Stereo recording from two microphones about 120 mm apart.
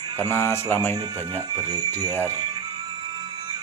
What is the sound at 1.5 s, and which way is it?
Speech, 35° right (ahead or behind).